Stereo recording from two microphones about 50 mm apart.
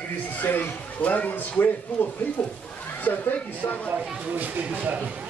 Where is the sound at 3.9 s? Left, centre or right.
Right.